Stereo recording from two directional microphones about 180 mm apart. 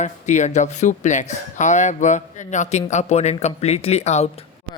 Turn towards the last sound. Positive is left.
turn(degrees=40)  # may be behind; listen again after turning